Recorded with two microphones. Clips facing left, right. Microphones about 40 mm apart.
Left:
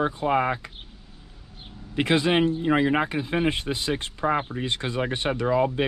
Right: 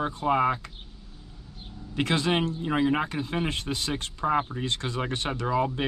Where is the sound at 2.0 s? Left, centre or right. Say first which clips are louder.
Left 4 dB; centre.